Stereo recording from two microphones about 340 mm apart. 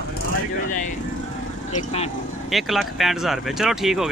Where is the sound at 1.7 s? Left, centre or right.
Centre.